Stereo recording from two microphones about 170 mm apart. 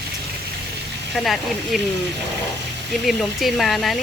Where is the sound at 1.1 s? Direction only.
Centre (ahead or behind).